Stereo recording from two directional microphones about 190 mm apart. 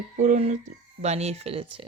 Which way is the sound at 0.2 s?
35° right (ahead or behind).